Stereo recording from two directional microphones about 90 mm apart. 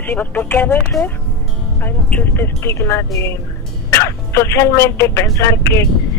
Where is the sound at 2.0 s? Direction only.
20° left (ahead or behind).